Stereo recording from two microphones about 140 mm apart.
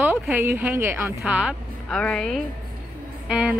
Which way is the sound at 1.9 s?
5° left (ahead or behind).